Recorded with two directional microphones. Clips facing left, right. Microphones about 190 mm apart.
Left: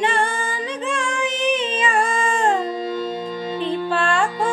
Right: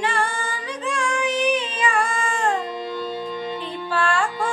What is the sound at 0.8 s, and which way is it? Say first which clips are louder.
Child singing: right 1 dB; 25° left (ahead or behind).